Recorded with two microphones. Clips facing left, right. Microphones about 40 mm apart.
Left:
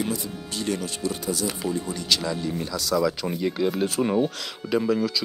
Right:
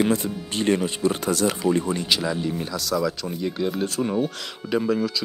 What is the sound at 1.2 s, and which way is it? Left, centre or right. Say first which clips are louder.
Speech: right 4 dB; right.